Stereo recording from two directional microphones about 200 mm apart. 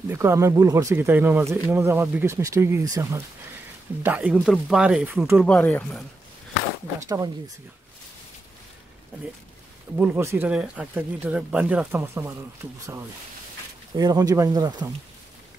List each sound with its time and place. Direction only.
0.1 s speech: 15° right (ahead or behind)
5.4 s speech: 5° left (ahead or behind)
7.0 s speech: 15° right (ahead or behind)
9.9 s speech: 10° right (ahead or behind)
13.9 s speech: 20° right (ahead or behind)